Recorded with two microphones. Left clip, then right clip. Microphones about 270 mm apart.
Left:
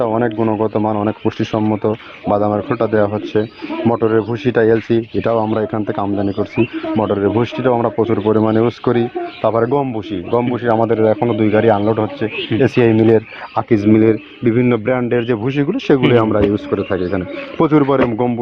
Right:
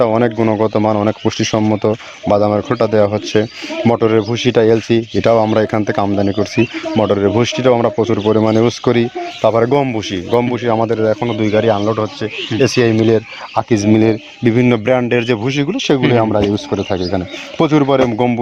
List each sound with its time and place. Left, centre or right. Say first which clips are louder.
0.0 s speech: right 3 dB; right